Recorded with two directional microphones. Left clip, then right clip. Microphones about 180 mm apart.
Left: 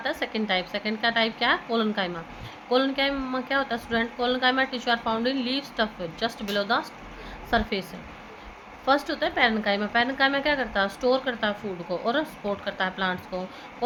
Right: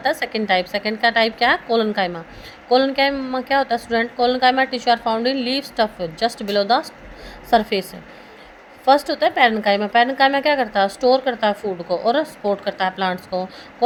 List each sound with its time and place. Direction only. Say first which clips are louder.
0.0 s a woman's voice: right 8 dB; 35° right (ahead or behind)
8.9 s a woman's voice: right 8 dB; 30° right (ahead or behind)